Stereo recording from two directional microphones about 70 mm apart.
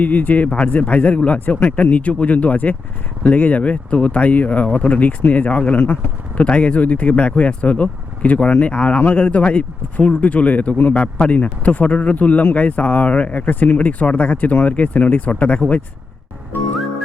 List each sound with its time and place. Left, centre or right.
0.0 s speech: left
6.4 s speech: centre